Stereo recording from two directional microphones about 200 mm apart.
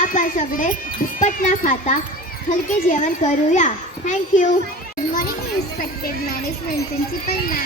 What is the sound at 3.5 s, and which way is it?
Speech, 40° left (ahead or behind).